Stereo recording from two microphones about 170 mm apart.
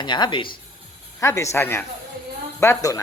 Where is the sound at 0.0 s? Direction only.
25° left (ahead or behind).